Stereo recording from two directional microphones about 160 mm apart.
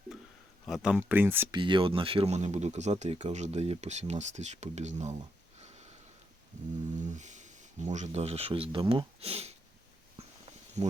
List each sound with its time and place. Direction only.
0.6 s speech: centre (ahead or behind)
1.5 s speech: 30° right (ahead or behind); by 5.1 s 45° right (ahead or behind)
7.0 s speech: 50° right (ahead or behind)